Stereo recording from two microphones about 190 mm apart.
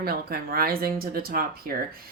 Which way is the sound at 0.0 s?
55° right (ahead or behind).